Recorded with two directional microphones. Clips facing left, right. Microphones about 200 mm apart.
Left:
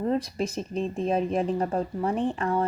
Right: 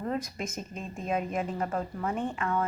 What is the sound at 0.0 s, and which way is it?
Speech, 30° left (ahead or behind).